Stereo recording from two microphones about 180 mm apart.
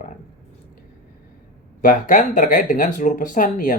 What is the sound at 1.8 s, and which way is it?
Speech, 50° left (ahead or behind).